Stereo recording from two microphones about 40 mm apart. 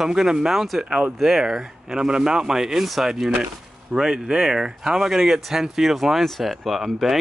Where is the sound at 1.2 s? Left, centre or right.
Centre.